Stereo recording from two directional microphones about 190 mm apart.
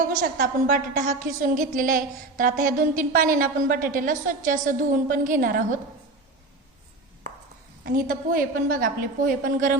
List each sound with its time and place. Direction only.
0.1 s a woman's voice: 45° right (ahead or behind)
7.9 s a woman's voice: 50° right (ahead or behind)